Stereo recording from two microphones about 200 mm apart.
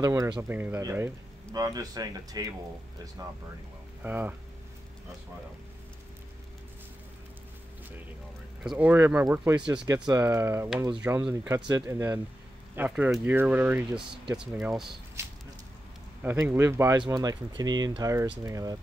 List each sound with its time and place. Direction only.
0.0 s speech: 15° right (ahead or behind)
8.6 s speech: 10° right (ahead or behind)